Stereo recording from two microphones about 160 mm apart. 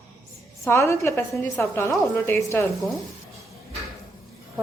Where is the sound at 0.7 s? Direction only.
20° left (ahead or behind).